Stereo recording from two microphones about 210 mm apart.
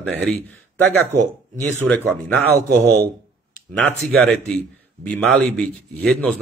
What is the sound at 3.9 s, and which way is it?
Speech, centre (ahead or behind).